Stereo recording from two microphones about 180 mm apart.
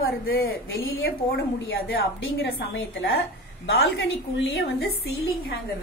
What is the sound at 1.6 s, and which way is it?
Speech, 60° left (ahead or behind).